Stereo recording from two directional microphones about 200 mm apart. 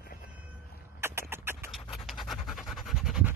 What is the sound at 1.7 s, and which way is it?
Scratch, centre (ahead or behind).